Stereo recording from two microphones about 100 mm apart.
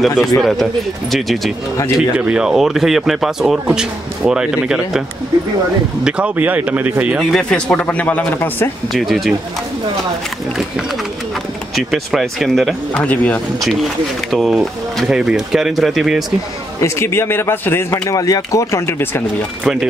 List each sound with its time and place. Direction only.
0.0 s speech: centre (ahead or behind)
2.0 s speech: 10° right (ahead or behind)
6.0 s speech: 10° right (ahead or behind)
7.4 s a man's voice: 10° left (ahead or behind)
8.9 s speech: centre (ahead or behind)
11.7 s speech: centre (ahead or behind)
13.0 s a man's voice: 15° left (ahead or behind)
13.6 s speech: centre (ahead or behind)
16.8 s a man's voice: 25° left (ahead or behind)
18.1 s speech: 35° left (ahead or behind)
19.6 s speech: 5° right (ahead or behind)